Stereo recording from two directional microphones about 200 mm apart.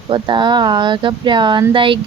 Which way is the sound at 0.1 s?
25° right (ahead or behind).